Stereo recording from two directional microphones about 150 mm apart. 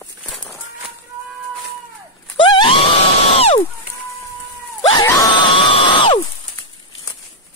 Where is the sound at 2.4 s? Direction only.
35° left (ahead or behind).